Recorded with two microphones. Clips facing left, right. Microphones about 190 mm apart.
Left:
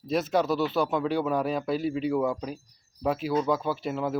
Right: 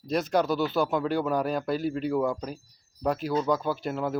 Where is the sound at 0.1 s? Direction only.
Centre (ahead or behind).